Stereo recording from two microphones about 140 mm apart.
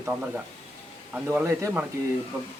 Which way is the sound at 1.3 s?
20° right (ahead or behind).